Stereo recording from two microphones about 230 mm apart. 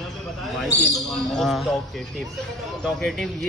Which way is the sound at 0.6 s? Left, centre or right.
Centre.